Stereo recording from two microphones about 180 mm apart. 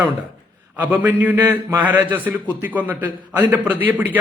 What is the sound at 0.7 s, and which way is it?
A man's voice, 10° right (ahead or behind).